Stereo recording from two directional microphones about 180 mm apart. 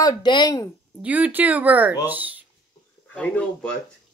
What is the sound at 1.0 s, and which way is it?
Speech, 10° right (ahead or behind).